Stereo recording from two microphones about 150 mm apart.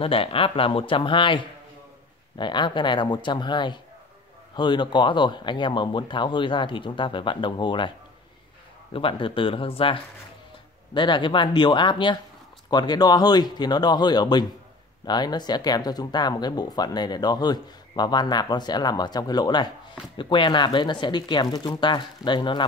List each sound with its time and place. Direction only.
0.0 s speech: 35° left (ahead or behind)
8.9 s speech: 35° left (ahead or behind)
11.0 s speech: 30° left (ahead or behind)